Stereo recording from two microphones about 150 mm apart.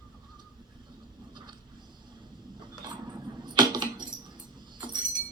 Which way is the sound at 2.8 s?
30° right (ahead or behind).